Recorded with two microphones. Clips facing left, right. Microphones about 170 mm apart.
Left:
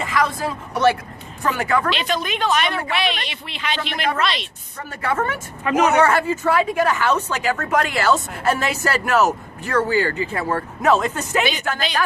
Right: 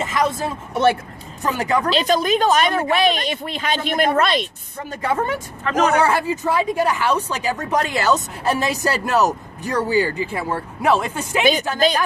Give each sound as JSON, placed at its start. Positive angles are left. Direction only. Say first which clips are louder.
{"t": 0.0, "sound": "speech", "louder": "right 1 dB", "side_deg": -20}
{"t": 1.9, "sound": "a woman's voice", "louder": "right 6 dB", "side_deg": -40}
{"t": 4.9, "sound": "speech", "louder": "right 1 dB", "side_deg": -15}
{"t": 5.6, "sound": "speech", "louder": "left 1 dB", "side_deg": 10}
{"t": 6.0, "sound": "speech", "louder": "left 1 dB", "side_deg": -15}